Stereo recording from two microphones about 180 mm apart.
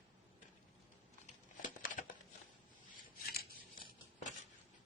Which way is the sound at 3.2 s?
55° left (ahead or behind).